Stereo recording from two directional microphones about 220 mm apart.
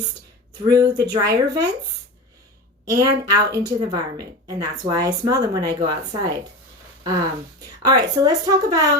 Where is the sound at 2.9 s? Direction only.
15° right (ahead or behind).